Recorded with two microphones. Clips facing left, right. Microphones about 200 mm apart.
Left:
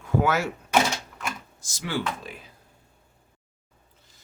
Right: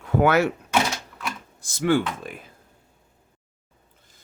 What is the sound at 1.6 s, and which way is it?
Speech, 55° right (ahead or behind).